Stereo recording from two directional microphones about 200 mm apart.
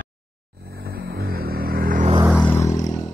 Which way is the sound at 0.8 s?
50° right (ahead or behind).